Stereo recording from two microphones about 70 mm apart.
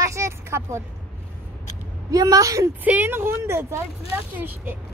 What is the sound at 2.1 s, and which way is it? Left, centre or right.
Speech, right.